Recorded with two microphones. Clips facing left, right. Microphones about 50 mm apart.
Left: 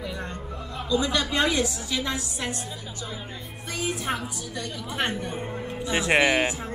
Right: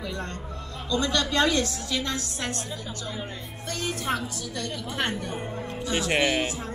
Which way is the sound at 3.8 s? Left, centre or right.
Centre.